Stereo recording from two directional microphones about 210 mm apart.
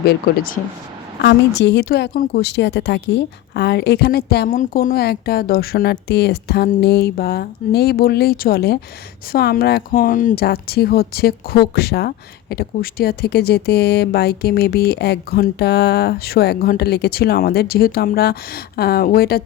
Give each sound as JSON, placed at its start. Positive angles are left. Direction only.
{"t": 0.0, "sound": "speech", "side_deg": 50}